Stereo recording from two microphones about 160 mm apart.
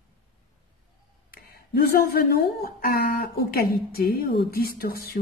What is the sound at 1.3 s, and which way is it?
Speech, 70° left (ahead or behind).